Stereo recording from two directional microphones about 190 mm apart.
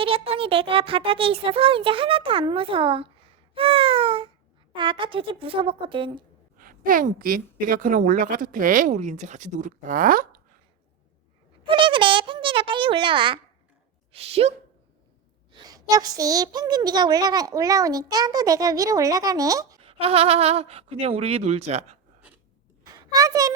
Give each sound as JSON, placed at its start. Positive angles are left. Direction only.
{"t": 0.0, "sound": "speech", "side_deg": -30}
{"t": 6.6, "sound": "a woman's voice", "side_deg": -45}
{"t": 11.6, "sound": "speech", "side_deg": -25}
{"t": 15.5, "sound": "speech", "side_deg": -20}
{"t": 19.8, "sound": "speech", "side_deg": -30}
{"t": 23.0, "sound": "a child's voice", "side_deg": -20}